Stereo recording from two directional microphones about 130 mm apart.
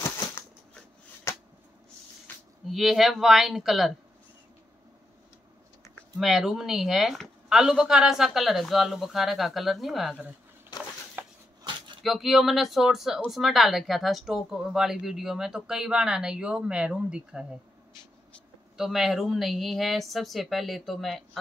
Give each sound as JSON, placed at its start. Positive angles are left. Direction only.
{"t": 1.3, "sound": "a sound", "side_deg": 25}
{"t": 2.7, "sound": "a woman's voice", "side_deg": 0}
{"t": 6.1, "sound": "a woman's voice", "side_deg": 0}
{"t": 11.2, "sound": "a sound", "side_deg": -15}
{"t": 12.0, "sound": "a woman's voice", "side_deg": 0}
{"t": 18.8, "sound": "a woman's voice", "side_deg": -5}